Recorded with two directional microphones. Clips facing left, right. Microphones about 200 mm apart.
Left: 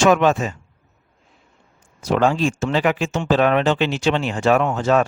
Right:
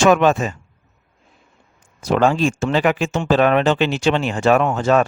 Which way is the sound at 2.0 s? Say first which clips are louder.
Right 2 dB; 50° right (ahead or behind).